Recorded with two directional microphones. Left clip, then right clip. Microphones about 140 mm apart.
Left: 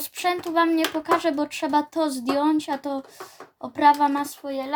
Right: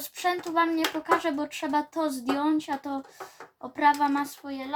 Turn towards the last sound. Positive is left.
turn(degrees=45)  # may be behind; listen again after turning